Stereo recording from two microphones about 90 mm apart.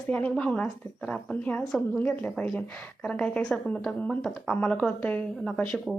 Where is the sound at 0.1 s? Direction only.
15° left (ahead or behind).